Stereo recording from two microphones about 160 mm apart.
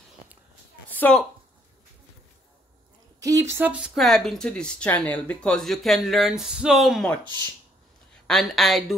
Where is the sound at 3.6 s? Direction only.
5° right (ahead or behind).